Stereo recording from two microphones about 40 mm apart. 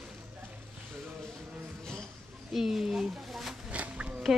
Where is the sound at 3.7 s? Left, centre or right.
Right.